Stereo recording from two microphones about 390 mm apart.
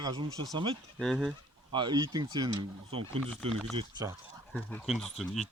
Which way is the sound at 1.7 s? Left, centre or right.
Centre.